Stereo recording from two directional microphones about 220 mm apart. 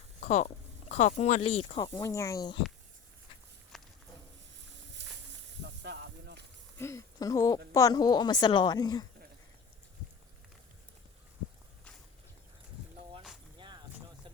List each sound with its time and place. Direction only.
0.2 s speech: 35° left (ahead or behind); by 2.6 s 15° left (ahead or behind)
3.7 s walk: centre (ahead or behind)
5.6 s music: 50° right (ahead or behind)
6.7 s a woman's voice: 15° left (ahead or behind)